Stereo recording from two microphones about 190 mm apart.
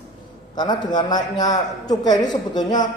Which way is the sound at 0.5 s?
25° left (ahead or behind).